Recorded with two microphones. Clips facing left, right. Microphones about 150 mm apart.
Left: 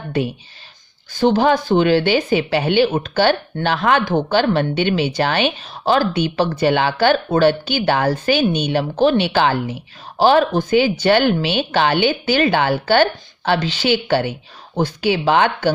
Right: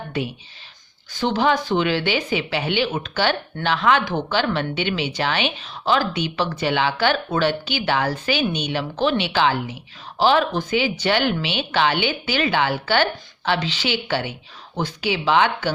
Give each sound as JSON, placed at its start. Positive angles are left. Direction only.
{"t": 1.2, "sound": "a woman's voice", "side_deg": 45}